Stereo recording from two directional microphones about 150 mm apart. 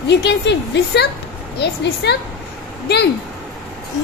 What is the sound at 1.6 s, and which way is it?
Speech, 90° left.